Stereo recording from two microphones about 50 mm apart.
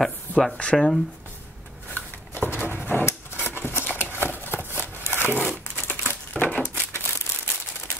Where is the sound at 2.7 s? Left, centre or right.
Left.